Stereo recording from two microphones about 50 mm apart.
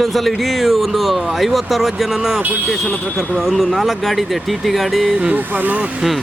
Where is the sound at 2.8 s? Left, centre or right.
Centre.